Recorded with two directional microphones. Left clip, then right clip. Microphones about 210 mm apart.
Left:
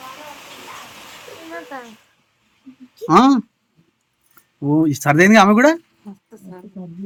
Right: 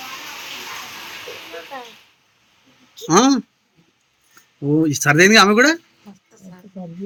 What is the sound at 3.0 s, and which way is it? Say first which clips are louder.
Speech: left 2 dB; 10° left (ahead or behind).